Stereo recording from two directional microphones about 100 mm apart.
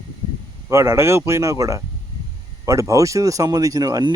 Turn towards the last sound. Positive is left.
turn(degrees=-40)  # may be behind; listen again after turning